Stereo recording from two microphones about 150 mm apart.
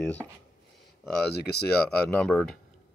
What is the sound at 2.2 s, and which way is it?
Speech, 5° left (ahead or behind).